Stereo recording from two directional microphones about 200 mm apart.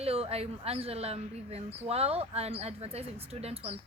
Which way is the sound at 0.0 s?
30° right (ahead or behind).